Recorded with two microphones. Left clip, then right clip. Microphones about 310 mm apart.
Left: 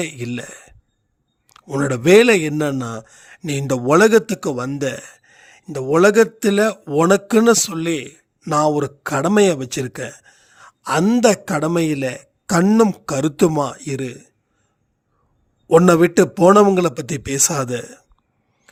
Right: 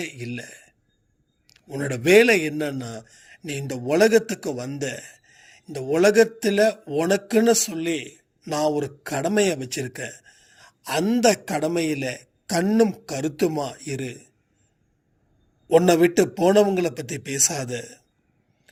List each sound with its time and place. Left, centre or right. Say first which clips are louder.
0.0 s a man's voice: left 6 dB; left
5.3 s a sound: left 4 dB; left
5.6 s a man's voice: left 5 dB; left
10.2 s a sound: left 5 dB; left
11.8 s a man's voice: left 5 dB; left
15.8 s a man's voice: left 5 dB; left